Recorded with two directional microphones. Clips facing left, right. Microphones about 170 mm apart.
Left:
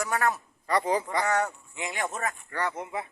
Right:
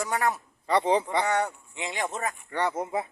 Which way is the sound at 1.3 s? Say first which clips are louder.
Even; 15° right (ahead or behind).